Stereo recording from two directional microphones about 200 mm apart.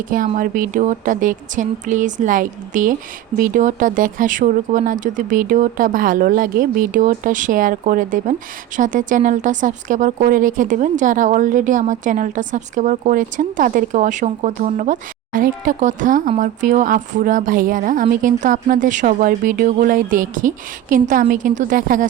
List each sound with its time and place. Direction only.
0.3 s speech: 45° right (ahead or behind)